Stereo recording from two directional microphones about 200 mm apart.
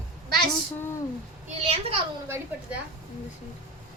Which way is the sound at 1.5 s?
30° right (ahead or behind).